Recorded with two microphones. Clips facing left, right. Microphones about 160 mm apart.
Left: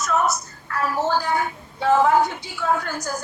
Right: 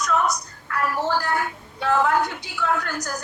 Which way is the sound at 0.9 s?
20° left (ahead or behind).